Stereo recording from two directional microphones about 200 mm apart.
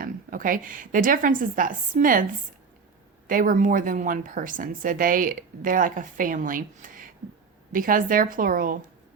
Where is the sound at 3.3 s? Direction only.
45° right (ahead or behind).